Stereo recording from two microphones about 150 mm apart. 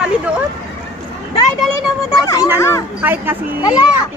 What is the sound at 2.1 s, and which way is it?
Speech, 25° left (ahead or behind).